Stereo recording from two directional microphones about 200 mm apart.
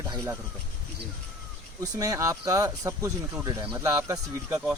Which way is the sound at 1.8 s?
20° right (ahead or behind).